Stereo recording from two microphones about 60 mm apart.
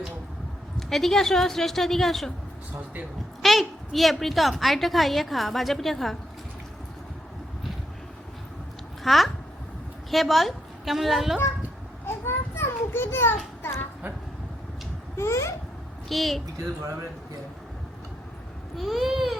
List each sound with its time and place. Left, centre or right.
0.8 s a woman's voice: centre
3.4 s a woman's voice: centre
9.0 s a woman's voice: centre
12.0 s a sound: left
15.1 s a child's voice: left
16.0 s a woman's voice: centre
18.8 s a woman's voice: centre